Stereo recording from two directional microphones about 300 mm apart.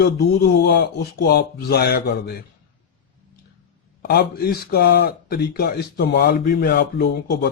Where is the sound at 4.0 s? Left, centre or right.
Left.